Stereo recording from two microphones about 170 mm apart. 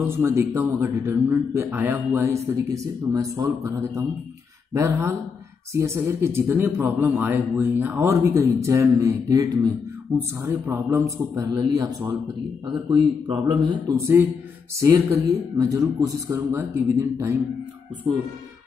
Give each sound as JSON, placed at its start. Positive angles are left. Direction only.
{"t": 0.0, "sound": "a man's voice", "side_deg": -15}
{"t": 13.3, "sound": "a man's voice", "side_deg": -30}